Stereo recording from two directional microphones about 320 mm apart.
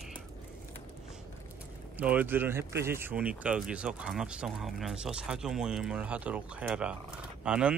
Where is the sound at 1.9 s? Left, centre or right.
Centre.